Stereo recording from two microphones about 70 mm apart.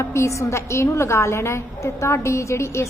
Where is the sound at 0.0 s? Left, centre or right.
Left.